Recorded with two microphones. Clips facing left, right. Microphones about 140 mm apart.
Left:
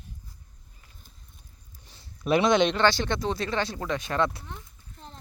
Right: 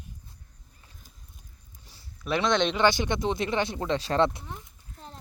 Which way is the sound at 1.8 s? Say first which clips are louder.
Left 5 dB; 20° left (ahead or behind).